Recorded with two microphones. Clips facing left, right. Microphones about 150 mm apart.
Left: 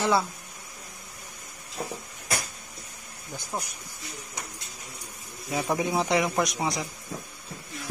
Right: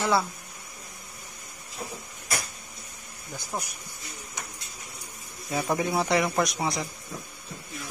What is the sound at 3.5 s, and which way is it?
Speech, 10° left (ahead or behind).